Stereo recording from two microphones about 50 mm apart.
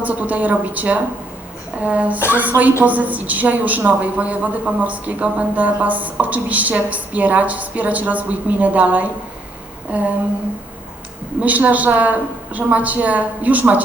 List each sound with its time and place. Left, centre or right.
0.0 s a woman's voice: right
9.9 s a sound: right
11.3 s a woman's voice: right